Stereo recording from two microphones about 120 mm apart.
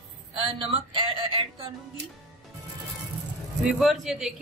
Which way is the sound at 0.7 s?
50° right (ahead or behind).